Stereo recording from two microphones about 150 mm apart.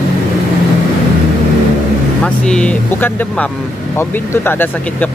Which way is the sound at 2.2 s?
5° left (ahead or behind).